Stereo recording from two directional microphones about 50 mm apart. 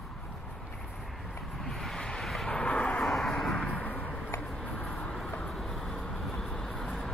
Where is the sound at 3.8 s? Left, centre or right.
Left.